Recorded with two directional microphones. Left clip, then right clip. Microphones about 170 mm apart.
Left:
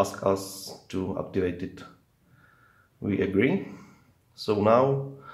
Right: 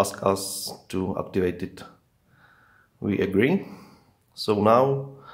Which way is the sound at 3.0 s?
20° right (ahead or behind).